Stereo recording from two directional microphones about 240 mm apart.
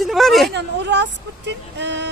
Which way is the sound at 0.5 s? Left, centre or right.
Right.